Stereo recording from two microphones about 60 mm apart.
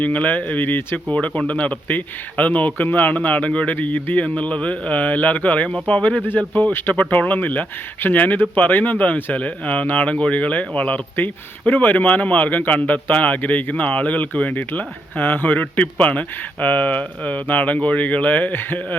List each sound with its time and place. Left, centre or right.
0.0 s speech: left
1.1 s speech: centre